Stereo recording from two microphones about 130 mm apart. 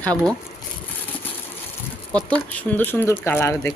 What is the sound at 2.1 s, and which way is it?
Speech, 10° left (ahead or behind).